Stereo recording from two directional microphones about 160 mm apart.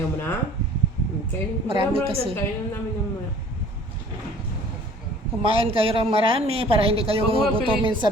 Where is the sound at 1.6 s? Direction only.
35° right (ahead or behind).